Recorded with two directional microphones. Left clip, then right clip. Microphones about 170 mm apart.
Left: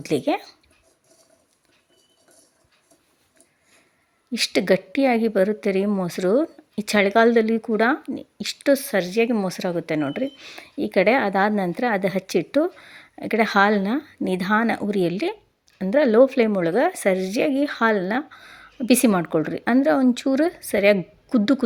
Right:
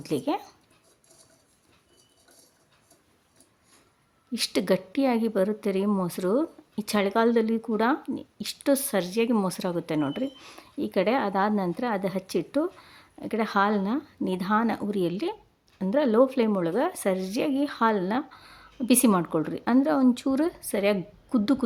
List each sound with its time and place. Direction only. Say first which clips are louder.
0.0 s a woman's voice: left 6 dB; 15° left (ahead or behind)
4.3 s a woman's voice: left 6 dB; 10° left (ahead or behind)
10.8 s a woman's voice: left 6 dB; 10° left (ahead or behind)